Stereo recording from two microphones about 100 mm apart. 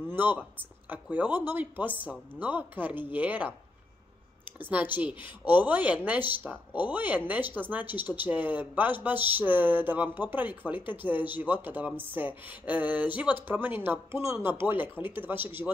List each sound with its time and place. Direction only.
0.1 s speech: 20° right (ahead or behind)
4.6 s speech: 15° right (ahead or behind)
13.8 s speech: 30° right (ahead or behind)